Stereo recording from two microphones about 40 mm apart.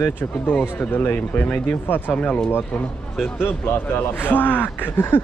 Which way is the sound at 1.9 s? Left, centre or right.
Left.